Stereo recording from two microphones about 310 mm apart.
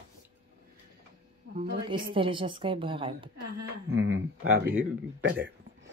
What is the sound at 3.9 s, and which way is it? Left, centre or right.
Speech, right.